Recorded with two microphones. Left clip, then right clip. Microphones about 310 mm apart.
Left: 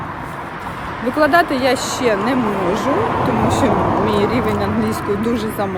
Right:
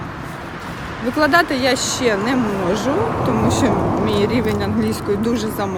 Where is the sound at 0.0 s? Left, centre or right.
Centre.